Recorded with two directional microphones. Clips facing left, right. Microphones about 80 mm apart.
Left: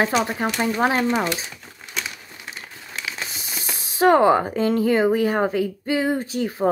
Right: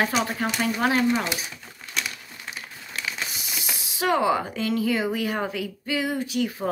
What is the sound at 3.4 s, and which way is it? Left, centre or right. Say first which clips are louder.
Speech: left 1 dB; left.